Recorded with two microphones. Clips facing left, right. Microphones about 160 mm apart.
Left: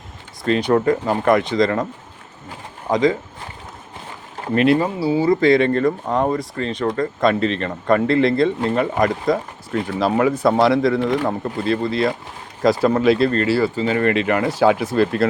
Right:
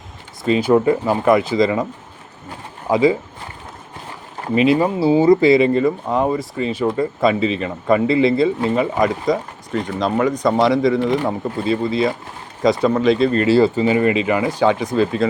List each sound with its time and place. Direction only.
0.4 s speech: 5° right (ahead or behind)
2.9 s speech: 10° right (ahead or behind)
4.5 s speech: centre (ahead or behind)
4.8 s speech: 20° right (ahead or behind)
5.4 s speech: 5° right (ahead or behind)
13.3 s speech: 20° right (ahead or behind); by 15.3 s 5° left (ahead or behind)